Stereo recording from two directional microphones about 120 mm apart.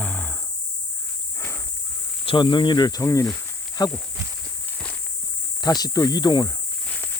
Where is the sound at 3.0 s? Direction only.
25° left (ahead or behind).